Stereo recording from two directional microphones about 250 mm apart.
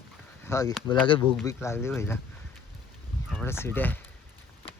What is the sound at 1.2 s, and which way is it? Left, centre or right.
Speech, centre.